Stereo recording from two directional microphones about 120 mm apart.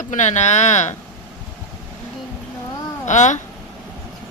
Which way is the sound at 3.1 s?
85° left.